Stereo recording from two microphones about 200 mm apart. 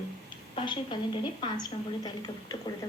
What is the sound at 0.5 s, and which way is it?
A woman's voice, 25° left (ahead or behind).